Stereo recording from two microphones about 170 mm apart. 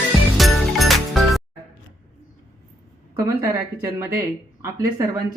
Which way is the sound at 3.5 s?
15° right (ahead or behind).